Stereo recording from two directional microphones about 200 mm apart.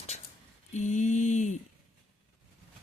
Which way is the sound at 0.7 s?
35° left (ahead or behind).